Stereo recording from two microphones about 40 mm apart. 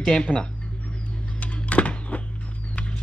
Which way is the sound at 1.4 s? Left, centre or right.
Left.